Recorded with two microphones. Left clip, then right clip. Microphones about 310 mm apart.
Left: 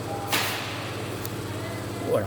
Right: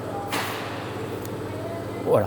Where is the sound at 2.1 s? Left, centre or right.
Right.